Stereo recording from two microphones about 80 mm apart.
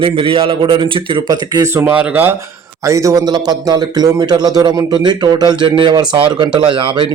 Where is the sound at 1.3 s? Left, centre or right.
Right.